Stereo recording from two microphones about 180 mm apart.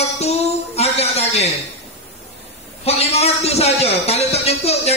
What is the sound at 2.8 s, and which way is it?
Speech, 35° left (ahead or behind).